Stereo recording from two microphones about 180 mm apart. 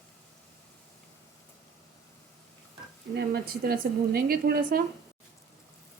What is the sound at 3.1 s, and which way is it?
A woman's voice, 60° right (ahead or behind).